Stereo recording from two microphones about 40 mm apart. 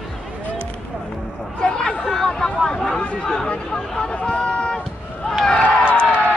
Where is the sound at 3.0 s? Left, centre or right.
Left.